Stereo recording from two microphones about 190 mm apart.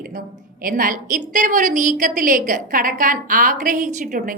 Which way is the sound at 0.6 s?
45° right (ahead or behind).